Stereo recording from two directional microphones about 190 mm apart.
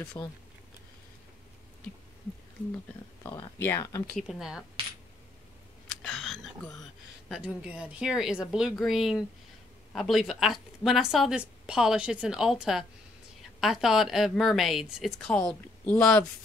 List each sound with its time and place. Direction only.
0.2 s speech: 25° left (ahead or behind)
3.3 s speech: 10° left (ahead or behind)
4.1 s a woman's voice: centre (ahead or behind)
6.0 s a sound: centre (ahead or behind)
7.2 s a woman's voice: 5° right (ahead or behind)